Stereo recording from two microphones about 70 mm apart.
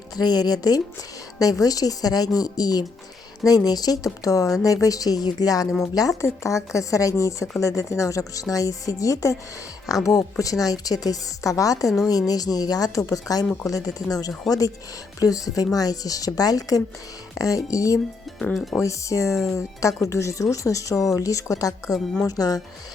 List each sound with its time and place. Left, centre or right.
0.2 s speech: left
6.2 s speech: left
18.5 s speech: centre
18.8 s speech: left